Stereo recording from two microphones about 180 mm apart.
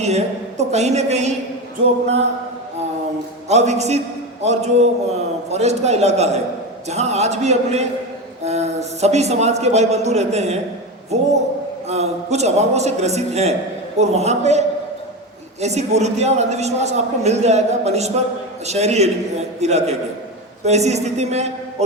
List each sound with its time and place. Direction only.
0.0 s a man's voice: 40° right (ahead or behind)
3.5 s a man's voice: 40° right (ahead or behind)
11.9 s a man's voice: 40° right (ahead or behind)
15.6 s a man's voice: 40° right (ahead or behind)